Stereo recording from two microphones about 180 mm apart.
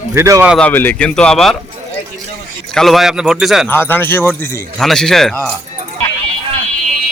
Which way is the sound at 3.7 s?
10° left (ahead or behind).